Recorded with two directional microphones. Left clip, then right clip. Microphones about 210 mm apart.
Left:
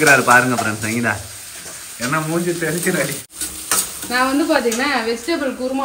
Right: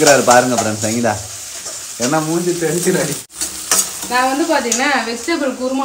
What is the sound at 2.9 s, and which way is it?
Speech, 5° right (ahead or behind).